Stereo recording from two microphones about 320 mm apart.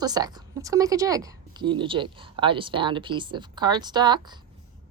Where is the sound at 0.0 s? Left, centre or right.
Centre.